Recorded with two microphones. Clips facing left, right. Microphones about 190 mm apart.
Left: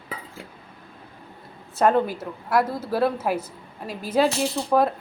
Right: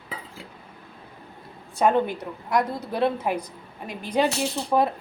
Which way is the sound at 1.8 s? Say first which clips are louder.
Left 1 dB; centre (ahead or behind).